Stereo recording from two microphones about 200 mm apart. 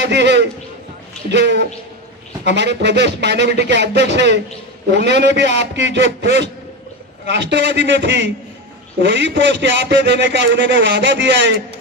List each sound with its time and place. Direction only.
0.0 s a man's voice: 60° right (ahead or behind)